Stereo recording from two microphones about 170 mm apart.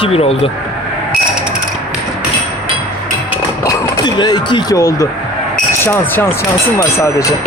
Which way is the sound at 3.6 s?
20° left (ahead or behind).